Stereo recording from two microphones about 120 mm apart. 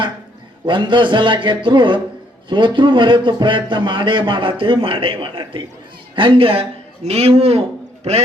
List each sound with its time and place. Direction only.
0.6 s a man's voice: 40° right (ahead or behind); by 7.6 s 60° right (ahead or behind)